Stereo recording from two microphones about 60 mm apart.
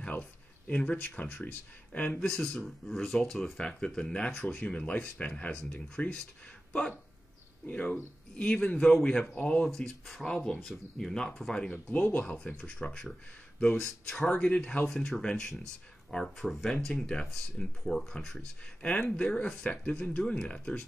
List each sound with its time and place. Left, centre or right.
0.0 s speech: left
2.1 s speech: centre; by 6.1 s left
7.6 s speech: left
9.2 s speech: left
9.8 s speech: centre
10.7 s speech: centre
11.7 s speech: left